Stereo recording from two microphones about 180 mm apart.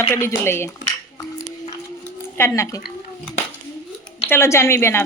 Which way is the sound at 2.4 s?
15° left (ahead or behind).